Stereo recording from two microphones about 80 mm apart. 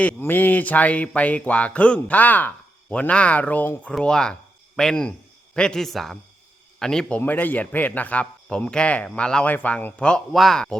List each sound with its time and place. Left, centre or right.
0.2 s a sound: left
3.9 s a man's voice: centre
7.2 s a man's voice: left
10.3 s speech: centre